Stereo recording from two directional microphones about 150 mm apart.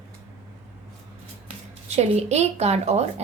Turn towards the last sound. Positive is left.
turn(degrees=-45)  # may be behind; listen again after turning